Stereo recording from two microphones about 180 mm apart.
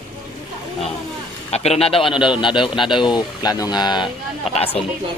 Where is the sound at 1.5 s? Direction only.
35° left (ahead or behind).